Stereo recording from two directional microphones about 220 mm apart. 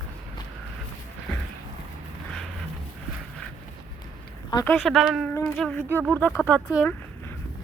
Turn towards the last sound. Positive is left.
turn(degrees=5)  # may be behind; listen again after turning